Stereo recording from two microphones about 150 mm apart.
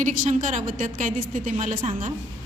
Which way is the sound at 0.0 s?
60° right (ahead or behind).